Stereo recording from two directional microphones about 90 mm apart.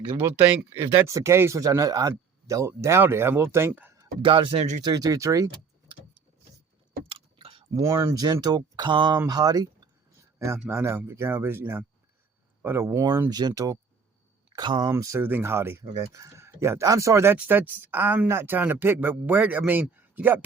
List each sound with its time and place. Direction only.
0.2 s speech: 20° right (ahead or behind)
4.2 s speech: 75° right (ahead or behind)
4.8 s speech: 45° right (ahead or behind)
7.1 s chewing: 80° right
7.7 s speech: 35° right (ahead or behind)
8.2 s speech: 50° right (ahead or behind)
10.3 s a sound: 30° right (ahead or behind)
10.7 s speech: 25° right (ahead or behind)
13.3 s speech: 45° right (ahead or behind)
14.5 s speech: 50° right (ahead or behind)
14.8 s speech: 35° right (ahead or behind)
15.2 s speech: 25° right (ahead or behind)
17.3 s speech: 20° right (ahead or behind)